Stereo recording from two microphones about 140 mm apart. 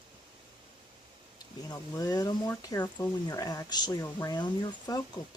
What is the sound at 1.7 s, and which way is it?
Speech, 25° left (ahead or behind).